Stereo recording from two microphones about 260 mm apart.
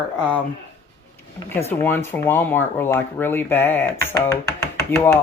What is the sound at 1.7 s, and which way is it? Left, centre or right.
Speech, centre.